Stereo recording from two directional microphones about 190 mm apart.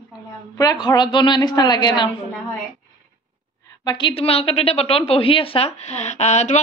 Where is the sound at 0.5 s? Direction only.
20° left (ahead or behind).